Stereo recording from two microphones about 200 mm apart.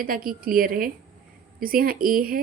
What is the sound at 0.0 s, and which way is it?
A woman's voice, 45° right (ahead or behind).